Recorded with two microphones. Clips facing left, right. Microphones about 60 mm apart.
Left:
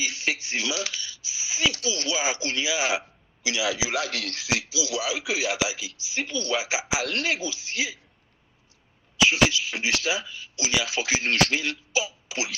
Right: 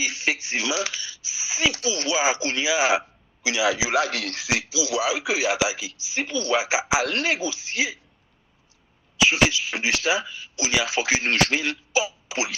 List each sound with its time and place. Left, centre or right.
0.0 s a sound: right
3.9 s speech: right
9.1 s speech: right